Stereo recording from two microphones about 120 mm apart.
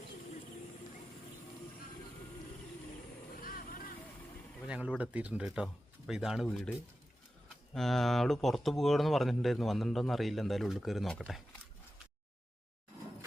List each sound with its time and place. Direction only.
4.6 s speech: 10° right (ahead or behind)
7.7 s speech: 5° left (ahead or behind)